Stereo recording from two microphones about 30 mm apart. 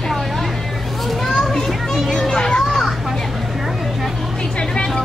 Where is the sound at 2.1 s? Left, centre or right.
Centre.